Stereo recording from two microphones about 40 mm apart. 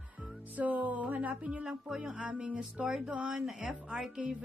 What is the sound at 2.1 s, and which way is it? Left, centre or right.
Music, right.